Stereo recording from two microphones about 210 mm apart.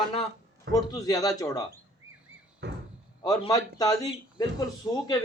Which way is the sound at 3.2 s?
20° left (ahead or behind).